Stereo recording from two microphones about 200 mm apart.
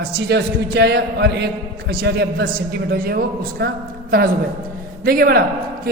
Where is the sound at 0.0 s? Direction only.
55° right (ahead or behind).